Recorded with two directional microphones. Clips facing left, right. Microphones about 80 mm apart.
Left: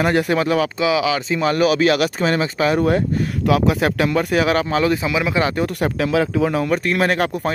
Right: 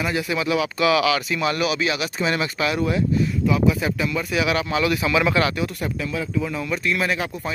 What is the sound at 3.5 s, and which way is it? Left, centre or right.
Speech, left.